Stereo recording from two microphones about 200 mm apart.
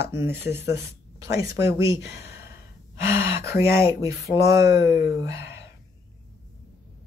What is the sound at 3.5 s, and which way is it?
Speech, 15° right (ahead or behind).